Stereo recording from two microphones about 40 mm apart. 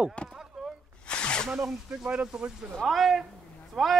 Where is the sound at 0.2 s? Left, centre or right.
Left.